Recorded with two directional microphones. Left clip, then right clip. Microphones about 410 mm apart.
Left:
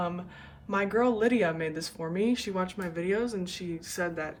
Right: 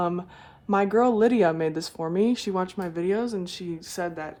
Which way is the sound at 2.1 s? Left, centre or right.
Centre.